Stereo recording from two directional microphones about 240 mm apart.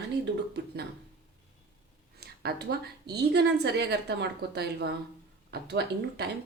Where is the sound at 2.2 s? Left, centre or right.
Right.